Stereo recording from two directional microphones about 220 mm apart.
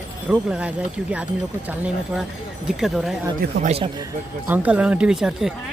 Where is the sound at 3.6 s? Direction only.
25° right (ahead or behind).